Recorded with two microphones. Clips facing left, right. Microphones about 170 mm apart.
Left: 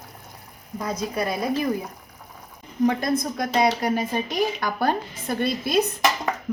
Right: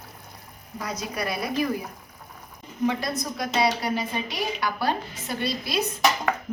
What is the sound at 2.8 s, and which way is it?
A woman's voice, 50° left (ahead or behind).